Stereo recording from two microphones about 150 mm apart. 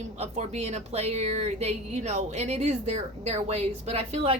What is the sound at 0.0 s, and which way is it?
A woman's voice, 50° right (ahead or behind).